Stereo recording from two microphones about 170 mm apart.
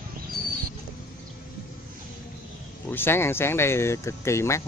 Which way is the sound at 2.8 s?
15° left (ahead or behind).